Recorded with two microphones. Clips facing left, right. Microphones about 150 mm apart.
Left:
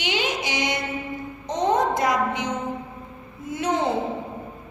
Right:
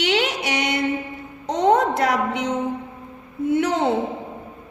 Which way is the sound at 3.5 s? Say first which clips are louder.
Right 5 dB; 65° right (ahead or behind).